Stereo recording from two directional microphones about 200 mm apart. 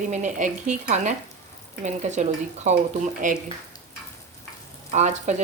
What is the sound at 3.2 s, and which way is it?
Speech, 40° right (ahead or behind).